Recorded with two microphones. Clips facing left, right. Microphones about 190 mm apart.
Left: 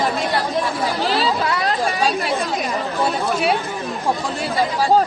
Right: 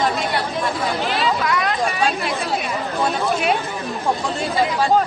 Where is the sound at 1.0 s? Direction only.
35° left (ahead or behind).